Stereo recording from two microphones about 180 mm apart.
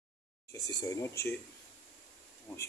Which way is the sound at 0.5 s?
15° left (ahead or behind).